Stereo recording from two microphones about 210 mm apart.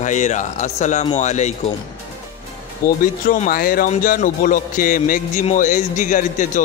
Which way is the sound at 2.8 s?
40° left (ahead or behind).